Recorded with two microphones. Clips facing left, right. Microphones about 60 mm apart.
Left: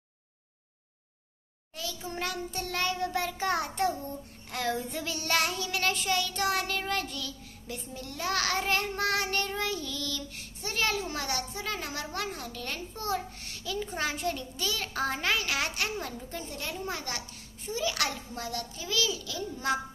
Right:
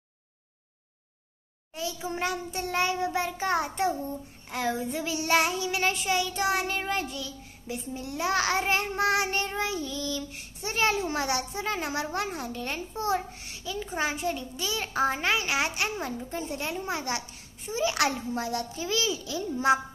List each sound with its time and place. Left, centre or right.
1.7 s child singing: centre
13.5 s child singing: centre
17.7 s a child's voice: right